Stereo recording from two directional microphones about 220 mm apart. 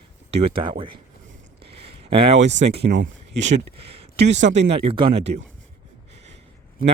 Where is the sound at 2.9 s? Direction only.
55° right (ahead or behind).